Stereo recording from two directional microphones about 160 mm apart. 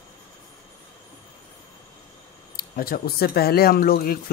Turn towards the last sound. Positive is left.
turn(degrees=65)  # may be behind; listen again after turning